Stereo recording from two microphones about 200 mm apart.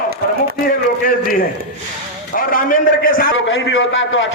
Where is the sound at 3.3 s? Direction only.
75° left (ahead or behind).